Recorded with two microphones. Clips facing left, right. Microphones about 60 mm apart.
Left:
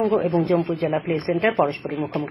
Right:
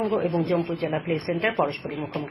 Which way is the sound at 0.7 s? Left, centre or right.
Centre.